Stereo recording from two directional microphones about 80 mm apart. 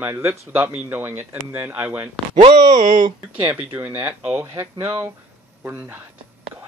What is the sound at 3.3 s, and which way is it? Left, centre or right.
Speech, centre.